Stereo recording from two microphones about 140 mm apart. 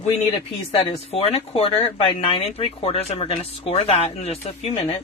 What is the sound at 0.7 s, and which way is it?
Speech, 45° left (ahead or behind).